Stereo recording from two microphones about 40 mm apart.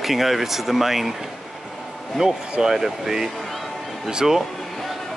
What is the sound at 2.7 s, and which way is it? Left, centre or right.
Speech, centre.